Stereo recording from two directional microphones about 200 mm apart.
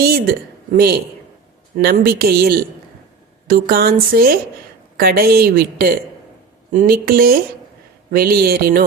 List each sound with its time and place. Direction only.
0.0 s a woman's voice: 50° right (ahead or behind)